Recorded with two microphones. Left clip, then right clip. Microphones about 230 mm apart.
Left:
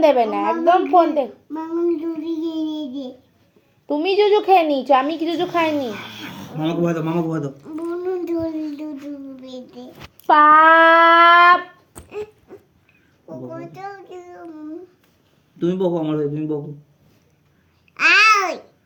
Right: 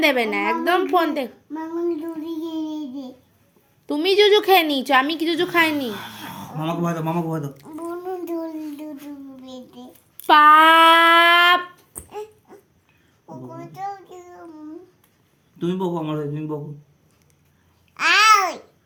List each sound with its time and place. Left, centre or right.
0.0 s a woman's voice: right
1.5 s child singing: centre
3.9 s a woman's voice: right
5.9 s speech: centre
7.6 s a sound: centre
10.2 s a sound: right
13.2 s child singing: centre
15.6 s speech: right
17.9 s babbling: centre